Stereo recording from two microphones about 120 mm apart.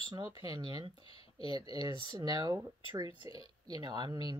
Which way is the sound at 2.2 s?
35° right (ahead or behind).